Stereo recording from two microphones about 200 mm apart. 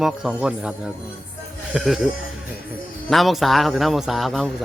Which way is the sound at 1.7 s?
Centre (ahead or behind).